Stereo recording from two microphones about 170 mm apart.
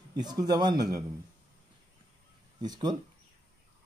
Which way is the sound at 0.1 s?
25° right (ahead or behind).